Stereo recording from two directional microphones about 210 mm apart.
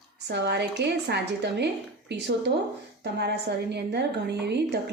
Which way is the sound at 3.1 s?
50° right (ahead or behind).